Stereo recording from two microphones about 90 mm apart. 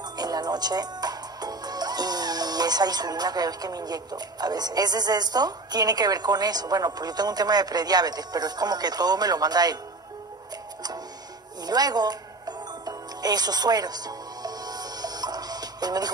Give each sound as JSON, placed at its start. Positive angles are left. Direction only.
{"t": 0.0, "sound": "speech", "side_deg": -50}
{"t": 11.6, "sound": "music", "side_deg": -45}